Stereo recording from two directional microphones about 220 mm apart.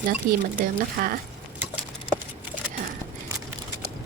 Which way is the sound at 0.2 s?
40° right (ahead or behind).